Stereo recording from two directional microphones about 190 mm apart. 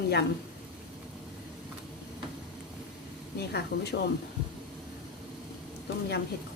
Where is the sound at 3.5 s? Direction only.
60° left (ahead or behind).